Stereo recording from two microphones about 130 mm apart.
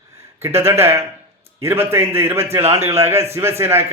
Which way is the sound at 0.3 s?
20° right (ahead or behind).